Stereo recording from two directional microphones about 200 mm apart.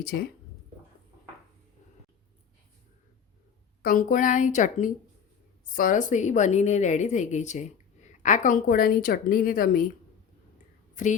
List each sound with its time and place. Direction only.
3.8 s a woman's voice: 40° left (ahead or behind)
11.0 s speech: 40° left (ahead or behind)